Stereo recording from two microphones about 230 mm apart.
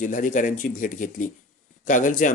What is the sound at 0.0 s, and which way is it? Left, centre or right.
Speech, left.